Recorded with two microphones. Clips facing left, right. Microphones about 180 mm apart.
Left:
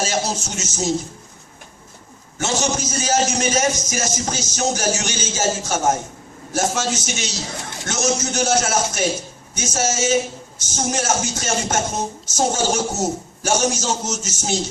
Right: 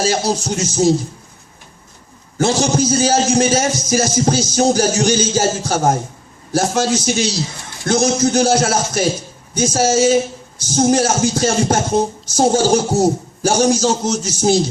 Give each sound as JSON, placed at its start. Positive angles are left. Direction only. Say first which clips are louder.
{"t": 0.0, "sound": "speech", "louder": "right 5 dB", "side_deg": -35}
{"t": 2.4, "sound": "speech", "louder": "right 7 dB", "side_deg": -35}